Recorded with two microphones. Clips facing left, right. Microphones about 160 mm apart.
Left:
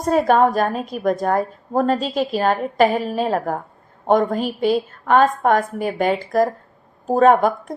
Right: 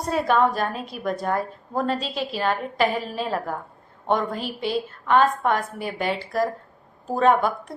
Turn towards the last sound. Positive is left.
turn(degrees=45)  # may be behind; listen again after turning